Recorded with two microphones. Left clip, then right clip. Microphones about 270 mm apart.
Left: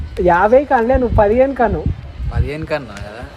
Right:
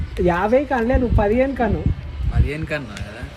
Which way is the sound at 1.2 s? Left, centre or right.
Left.